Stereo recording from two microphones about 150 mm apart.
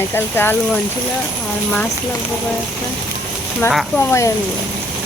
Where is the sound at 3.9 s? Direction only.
15° left (ahead or behind).